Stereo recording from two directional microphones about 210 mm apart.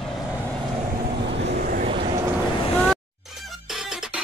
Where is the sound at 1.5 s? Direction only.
40° right (ahead or behind).